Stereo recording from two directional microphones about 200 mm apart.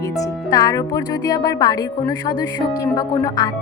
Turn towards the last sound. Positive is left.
turn(degrees=20)  # may be behind; listen again after turning